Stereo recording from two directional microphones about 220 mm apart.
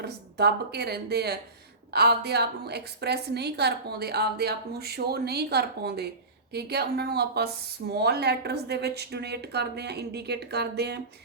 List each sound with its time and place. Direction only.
0.0 s speech: 45° right (ahead or behind)